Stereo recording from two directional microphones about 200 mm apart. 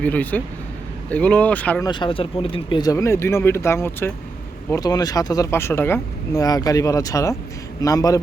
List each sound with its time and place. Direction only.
0.0 s speech: 10° left (ahead or behind)
1.8 s speech: 25° left (ahead or behind)